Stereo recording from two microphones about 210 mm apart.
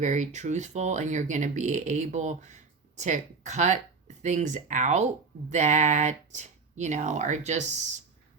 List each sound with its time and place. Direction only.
0.0 s speech: 35° right (ahead or behind)